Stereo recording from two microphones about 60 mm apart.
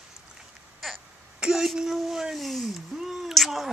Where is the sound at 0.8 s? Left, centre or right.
Centre.